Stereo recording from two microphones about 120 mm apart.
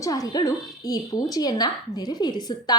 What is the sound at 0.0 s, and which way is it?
A woman's voice, 30° left (ahead or behind).